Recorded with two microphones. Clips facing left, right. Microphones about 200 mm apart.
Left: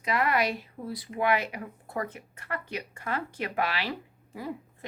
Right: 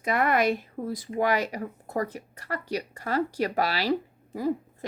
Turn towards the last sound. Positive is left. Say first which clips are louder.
# right 9 dB
turn(degrees=-40)  # may be behind; listen again after turning